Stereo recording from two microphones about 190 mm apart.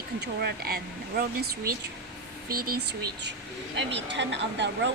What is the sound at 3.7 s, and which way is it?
A woman's voice, 65° right (ahead or behind).